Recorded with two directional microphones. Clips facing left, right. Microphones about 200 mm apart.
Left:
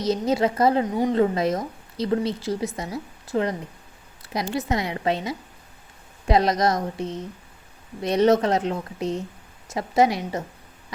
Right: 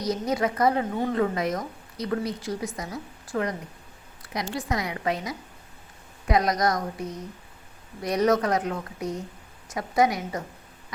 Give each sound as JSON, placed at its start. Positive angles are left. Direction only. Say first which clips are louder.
{"t": 0.0, "sound": "speech", "louder": "left 4 dB", "side_deg": 25}
{"t": 0.9, "sound": "a woman's voice", "louder": "left 4 dB", "side_deg": 15}
{"t": 1.1, "sound": "speech", "louder": "left 4 dB", "side_deg": 30}